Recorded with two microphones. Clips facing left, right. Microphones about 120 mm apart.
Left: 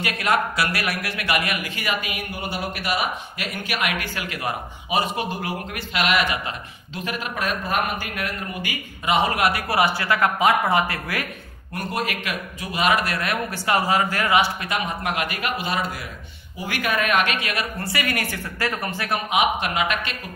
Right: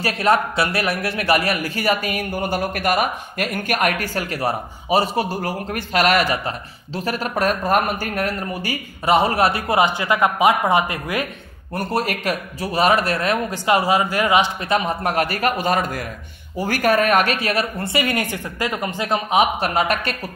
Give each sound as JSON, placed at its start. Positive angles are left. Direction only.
{"t": 0.0, "sound": "a man's voice", "side_deg": -30}
{"t": 11.7, "sound": "speech", "side_deg": -35}
{"t": 14.6, "sound": "a man's voice", "side_deg": -30}